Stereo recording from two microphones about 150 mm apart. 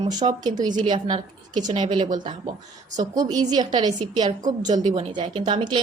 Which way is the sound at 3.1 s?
25° right (ahead or behind).